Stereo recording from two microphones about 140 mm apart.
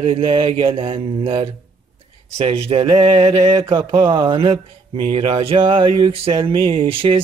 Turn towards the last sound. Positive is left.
turn(degrees=-40)  # may be behind; listen again after turning